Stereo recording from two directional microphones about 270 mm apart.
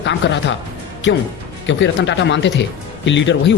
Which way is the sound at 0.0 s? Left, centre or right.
Left.